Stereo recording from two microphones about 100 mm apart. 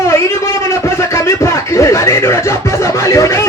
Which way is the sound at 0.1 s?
25° left (ahead or behind).